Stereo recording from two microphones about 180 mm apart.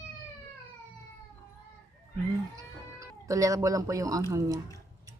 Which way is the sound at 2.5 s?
20° right (ahead or behind).